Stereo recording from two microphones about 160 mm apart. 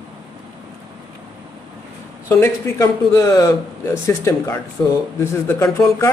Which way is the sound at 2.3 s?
15° left (ahead or behind).